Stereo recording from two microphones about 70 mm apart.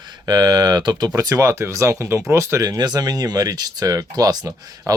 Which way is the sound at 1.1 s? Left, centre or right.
Right.